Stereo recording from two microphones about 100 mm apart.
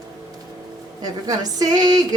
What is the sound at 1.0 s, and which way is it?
Speech, 40° right (ahead or behind).